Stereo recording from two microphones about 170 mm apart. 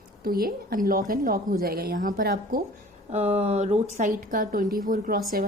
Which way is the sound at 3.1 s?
40° right (ahead or behind).